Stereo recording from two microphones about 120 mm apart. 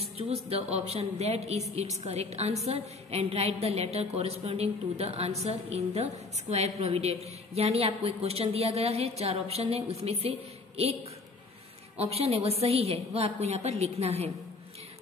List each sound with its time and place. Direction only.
0.0 s a woman's voice: 60° right (ahead or behind)
12.0 s a woman's voice: 55° right (ahead or behind)